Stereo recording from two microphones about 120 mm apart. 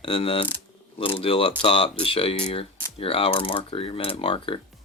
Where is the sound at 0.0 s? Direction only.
50° left (ahead or behind).